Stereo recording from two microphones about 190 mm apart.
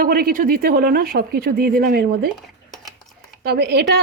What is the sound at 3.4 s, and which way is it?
Speech, 55° right (ahead or behind).